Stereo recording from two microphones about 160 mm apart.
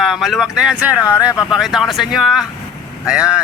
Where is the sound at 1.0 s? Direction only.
20° left (ahead or behind).